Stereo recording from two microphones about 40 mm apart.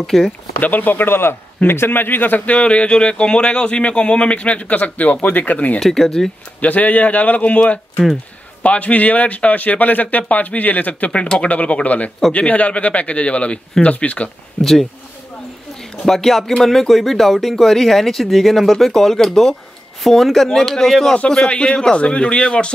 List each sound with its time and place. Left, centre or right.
0.0 s speech: centre
0.6 s a man's voice: left
2.4 s speech: left
5.8 s speech: centre
6.6 s speech: left
14.6 s speech: centre
16.0 s speech: centre
21.5 s speech: left